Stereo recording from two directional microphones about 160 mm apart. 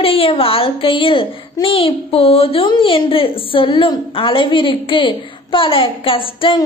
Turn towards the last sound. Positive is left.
turn(degrees=35)  # may be behind; listen again after turning